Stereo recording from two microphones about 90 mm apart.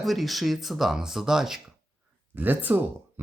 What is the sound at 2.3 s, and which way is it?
Speech, 20° right (ahead or behind).